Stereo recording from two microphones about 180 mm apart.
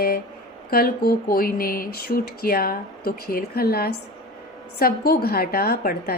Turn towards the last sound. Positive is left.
turn(degrees=55)  # may be behind; listen again after turning